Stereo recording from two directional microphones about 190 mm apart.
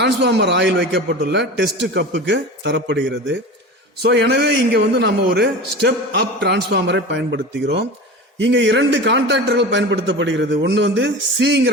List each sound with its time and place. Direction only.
0.0 s a man's voice: 65° right (ahead or behind)
4.0 s a man's voice: 60° right (ahead or behind)